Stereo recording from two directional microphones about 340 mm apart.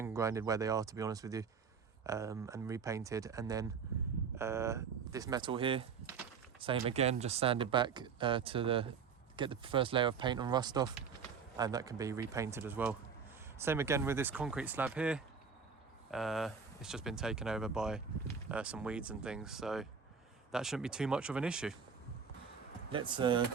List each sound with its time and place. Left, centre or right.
0.0 s speech: centre
22.9 s speech: centre